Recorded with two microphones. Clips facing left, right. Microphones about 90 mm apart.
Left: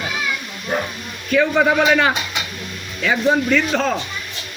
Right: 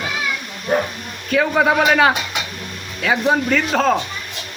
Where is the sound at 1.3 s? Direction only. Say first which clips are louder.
Even; 50° right (ahead or behind).